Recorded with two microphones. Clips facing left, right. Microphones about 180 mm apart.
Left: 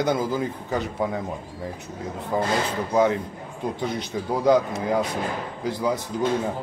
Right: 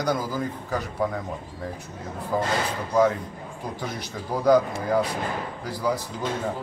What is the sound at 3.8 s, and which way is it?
Speech, 20° left (ahead or behind).